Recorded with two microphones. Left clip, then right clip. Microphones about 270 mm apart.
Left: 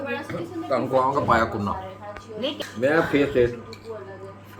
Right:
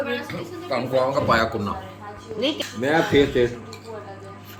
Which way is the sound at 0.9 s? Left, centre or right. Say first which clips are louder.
Right 1 dB; left.